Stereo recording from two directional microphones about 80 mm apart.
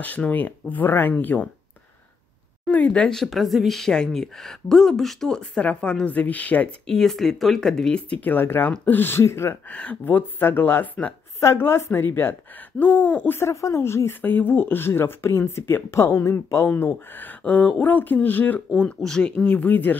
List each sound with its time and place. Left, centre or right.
0.0 s speech: centre
2.7 s speech: centre
6.9 s speech: centre
8.2 s speech: left
9.7 s speech: centre
11.3 s speech: left
13.4 s speech: left
16.7 s speech: left
18.8 s speech: centre